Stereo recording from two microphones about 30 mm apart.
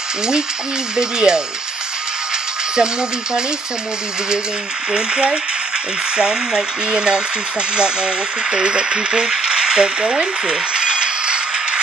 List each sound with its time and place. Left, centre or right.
0.9 s speech: right
2.7 s speech: right
4.9 s speech: right
9.2 s music: centre
9.5 s speech: right
10.5 s music: right